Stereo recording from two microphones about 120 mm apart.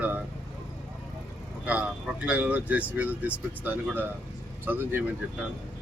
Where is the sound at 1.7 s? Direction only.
10° right (ahead or behind).